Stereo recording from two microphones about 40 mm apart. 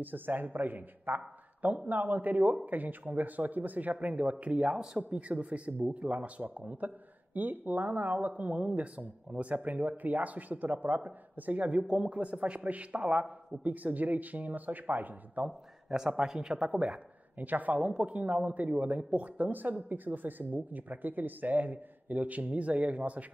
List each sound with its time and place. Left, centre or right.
0.0 s speech: right
4.1 s a man's voice: right
4.9 s speech: centre
5.3 s a man's voice: right
13.8 s speech: right
15.9 s speech: centre
17.4 s a man's voice: right